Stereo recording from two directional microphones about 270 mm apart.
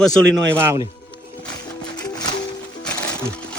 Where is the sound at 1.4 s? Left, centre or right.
Centre.